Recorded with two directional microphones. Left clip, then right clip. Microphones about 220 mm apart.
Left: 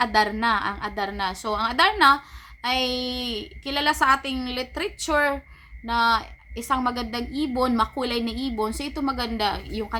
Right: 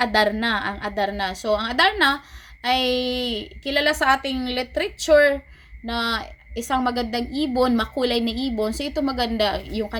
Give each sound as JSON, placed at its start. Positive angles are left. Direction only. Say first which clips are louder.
{"t": 0.0, "sound": "a woman's voice", "louder": "right 1 dB", "side_deg": -5}